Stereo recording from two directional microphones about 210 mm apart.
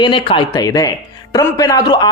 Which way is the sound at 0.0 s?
20° left (ahead or behind).